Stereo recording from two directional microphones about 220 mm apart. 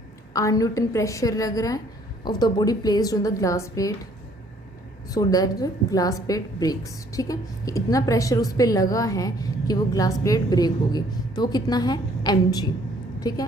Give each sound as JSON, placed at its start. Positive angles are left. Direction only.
{"t": 0.3, "sound": "a woman's voice", "side_deg": 15}
{"t": 5.0, "sound": "a woman's voice", "side_deg": 15}
{"t": 13.1, "sound": "a sound", "side_deg": 15}